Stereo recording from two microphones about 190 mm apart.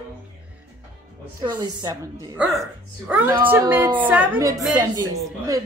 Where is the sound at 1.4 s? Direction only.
20° right (ahead or behind).